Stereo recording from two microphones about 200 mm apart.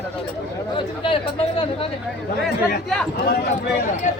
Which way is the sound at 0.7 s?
25° left (ahead or behind).